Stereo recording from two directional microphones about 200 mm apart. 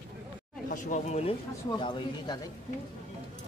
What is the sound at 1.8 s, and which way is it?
Speech, 20° left (ahead or behind).